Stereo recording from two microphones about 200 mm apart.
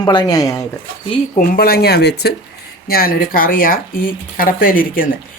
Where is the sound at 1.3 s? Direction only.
50° left (ahead or behind).